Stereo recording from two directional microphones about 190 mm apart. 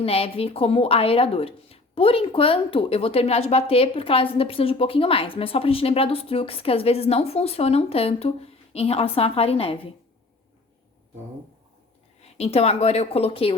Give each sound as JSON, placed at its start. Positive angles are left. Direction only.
{"t": 0.0, "sound": "a woman's voice", "side_deg": 30}
{"t": 12.2, "sound": "a woman's voice", "side_deg": 35}